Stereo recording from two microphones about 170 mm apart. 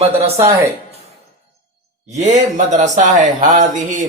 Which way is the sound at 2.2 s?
45° right (ahead or behind).